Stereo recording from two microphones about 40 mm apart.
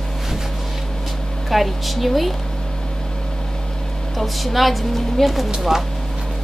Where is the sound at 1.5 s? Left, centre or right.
Centre.